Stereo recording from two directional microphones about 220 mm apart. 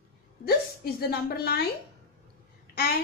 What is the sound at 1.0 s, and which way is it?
Speech, 45° left (ahead or behind).